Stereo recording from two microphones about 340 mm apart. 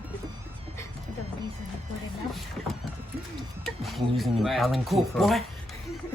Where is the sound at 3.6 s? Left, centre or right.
Centre.